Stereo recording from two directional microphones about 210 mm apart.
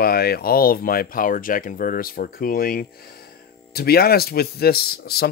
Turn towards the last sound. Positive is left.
turn(degrees=50)  # may be behind; listen again after turning